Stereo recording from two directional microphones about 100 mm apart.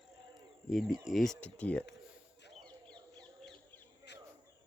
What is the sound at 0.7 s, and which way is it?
Speech, centre (ahead or behind).